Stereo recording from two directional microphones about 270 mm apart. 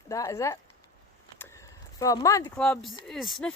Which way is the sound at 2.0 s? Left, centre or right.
Centre.